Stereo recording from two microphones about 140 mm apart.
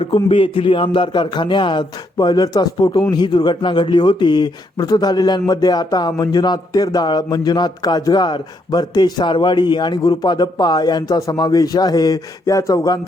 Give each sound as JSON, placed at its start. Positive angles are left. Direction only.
{"t": 0.0, "sound": "a man's voice", "side_deg": 40}